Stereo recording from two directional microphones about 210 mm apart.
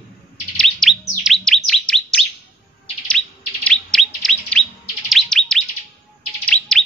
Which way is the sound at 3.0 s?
5° left (ahead or behind).